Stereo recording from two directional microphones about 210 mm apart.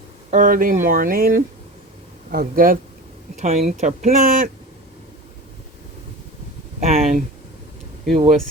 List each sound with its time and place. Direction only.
0.3 s speech: 40° right (ahead or behind)
3.4 s speech: 30° right (ahead or behind)
6.7 s speech: 35° right (ahead or behind)